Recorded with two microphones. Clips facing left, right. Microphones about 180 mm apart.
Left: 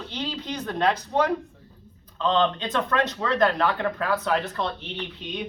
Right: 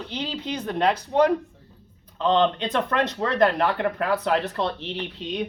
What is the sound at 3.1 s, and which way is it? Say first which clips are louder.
Speech: right 3 dB; 25° right (ahead or behind).